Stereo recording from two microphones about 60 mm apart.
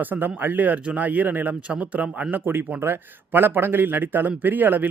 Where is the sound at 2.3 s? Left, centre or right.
Right.